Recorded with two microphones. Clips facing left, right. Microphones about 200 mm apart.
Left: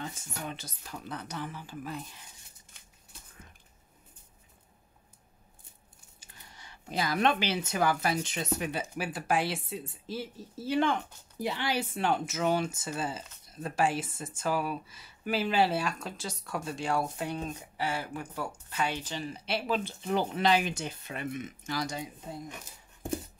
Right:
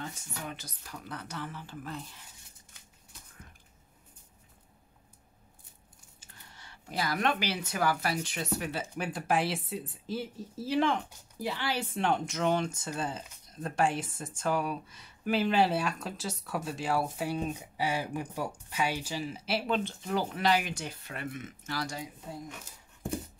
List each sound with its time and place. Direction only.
0.0 s speech: 25° left (ahead or behind)
6.2 s speech: 15° left (ahead or behind)
8.9 s speech: 5° left (ahead or behind)
11.4 s speech: 15° left (ahead or behind)
11.8 s speech: centre (ahead or behind)
20.1 s speech: 20° left (ahead or behind)